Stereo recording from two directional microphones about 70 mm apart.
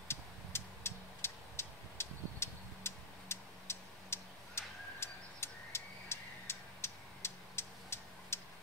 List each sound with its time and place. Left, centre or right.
0.1 s vehicle: left